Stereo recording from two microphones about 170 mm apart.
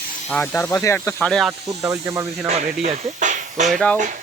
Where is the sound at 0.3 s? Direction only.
10° left (ahead or behind).